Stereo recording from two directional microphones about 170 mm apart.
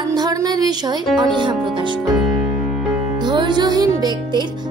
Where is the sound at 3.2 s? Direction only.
25° right (ahead or behind).